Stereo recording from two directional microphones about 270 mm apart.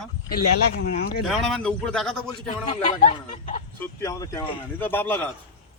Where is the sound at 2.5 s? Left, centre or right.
Left.